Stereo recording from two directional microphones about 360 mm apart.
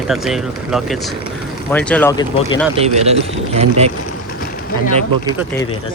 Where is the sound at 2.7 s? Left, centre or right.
Centre.